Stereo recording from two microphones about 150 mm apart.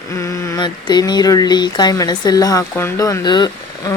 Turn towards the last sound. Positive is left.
turn(degrees=30)  # may be behind; listen again after turning